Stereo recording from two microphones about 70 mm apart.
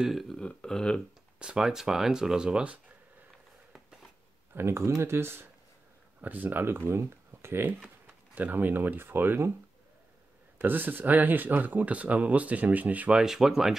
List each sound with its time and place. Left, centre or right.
0.0 s speech: centre
0.4 s speech: centre
1.4 s speech: centre
4.6 s speech: right
6.2 s speech: right
8.4 s speech: right
10.6 s speech: right
13.2 s speech: centre